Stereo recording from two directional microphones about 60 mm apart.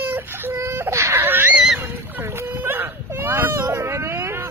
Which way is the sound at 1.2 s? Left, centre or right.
Right.